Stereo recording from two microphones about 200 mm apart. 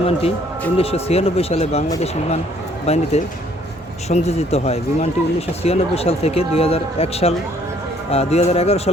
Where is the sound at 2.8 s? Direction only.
35° left (ahead or behind).